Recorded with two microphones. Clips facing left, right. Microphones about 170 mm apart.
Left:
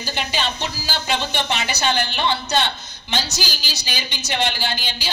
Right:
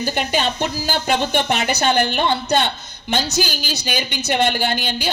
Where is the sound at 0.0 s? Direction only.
50° right (ahead or behind).